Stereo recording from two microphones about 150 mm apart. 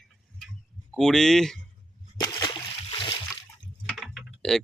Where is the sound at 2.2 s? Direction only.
25° left (ahead or behind).